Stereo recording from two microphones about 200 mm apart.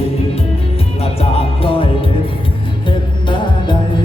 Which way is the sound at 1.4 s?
25° left (ahead or behind).